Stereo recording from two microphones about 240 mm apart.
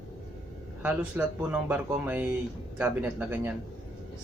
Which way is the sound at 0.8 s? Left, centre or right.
Centre.